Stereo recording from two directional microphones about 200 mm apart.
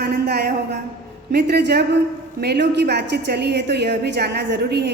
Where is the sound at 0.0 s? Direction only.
50° right (ahead or behind).